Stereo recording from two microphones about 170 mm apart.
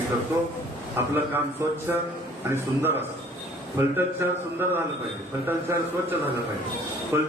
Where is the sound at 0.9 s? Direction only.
10° right (ahead or behind).